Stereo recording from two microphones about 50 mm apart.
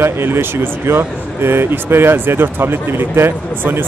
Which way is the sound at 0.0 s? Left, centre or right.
Right.